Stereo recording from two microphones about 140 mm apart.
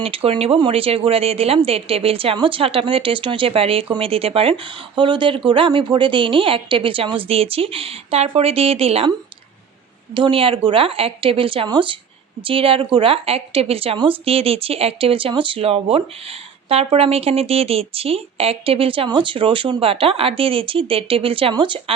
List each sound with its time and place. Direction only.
0.0 s speech: 40° right (ahead or behind)
10.2 s a woman's voice: 40° right (ahead or behind)